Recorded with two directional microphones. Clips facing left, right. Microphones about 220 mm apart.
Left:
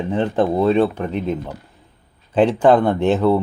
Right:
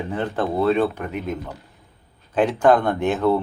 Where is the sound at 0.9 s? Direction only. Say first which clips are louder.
Left 5 dB; 30° left (ahead or behind).